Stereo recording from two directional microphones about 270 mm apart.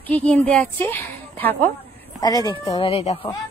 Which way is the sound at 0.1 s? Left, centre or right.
Centre.